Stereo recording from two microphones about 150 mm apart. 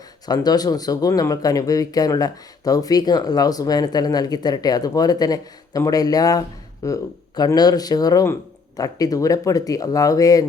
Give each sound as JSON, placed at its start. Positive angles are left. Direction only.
{"t": 0.3, "sound": "speech", "side_deg": 25}